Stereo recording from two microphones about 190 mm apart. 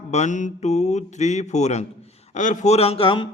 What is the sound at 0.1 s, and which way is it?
Speech, 40° left (ahead or behind).